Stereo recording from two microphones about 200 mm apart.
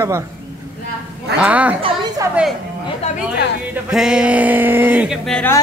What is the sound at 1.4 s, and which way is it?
Speech, 5° right (ahead or behind).